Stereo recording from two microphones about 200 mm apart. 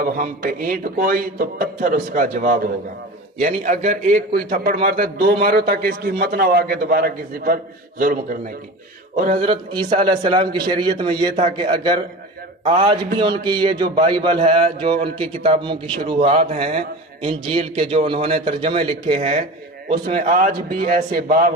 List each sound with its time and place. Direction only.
0.0 s a man's voice: 45° right (ahead or behind)
9.1 s mantra: 40° right (ahead or behind)
9.4 s speech: 25° right (ahead or behind)
12.6 s a man's voice: 35° right (ahead or behind)
13.2 s speech: 20° right (ahead or behind)
16.2 s a man's voice: 35° right (ahead or behind)
19.1 s a man's voice: 35° right (ahead or behind)